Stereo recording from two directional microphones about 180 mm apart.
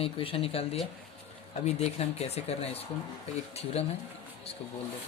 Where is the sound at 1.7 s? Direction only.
35° left (ahead or behind).